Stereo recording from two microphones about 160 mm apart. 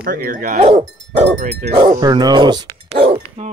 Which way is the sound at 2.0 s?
25° right (ahead or behind).